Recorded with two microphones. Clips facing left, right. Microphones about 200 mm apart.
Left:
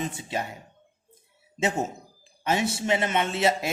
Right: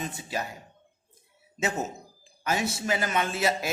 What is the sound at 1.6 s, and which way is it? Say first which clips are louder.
A man's voice: left 3 dB; 30° left (ahead or behind).